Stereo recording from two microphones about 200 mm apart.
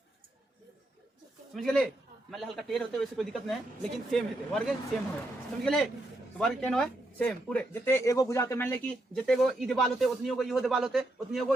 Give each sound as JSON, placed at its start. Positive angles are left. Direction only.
{"t": 1.5, "sound": "speech", "side_deg": 0}